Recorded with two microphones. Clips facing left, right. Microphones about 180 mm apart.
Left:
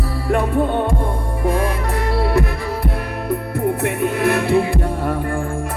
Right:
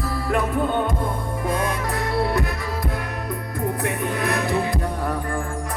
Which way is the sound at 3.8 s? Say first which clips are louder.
Left 5 dB; 25° left (ahead or behind).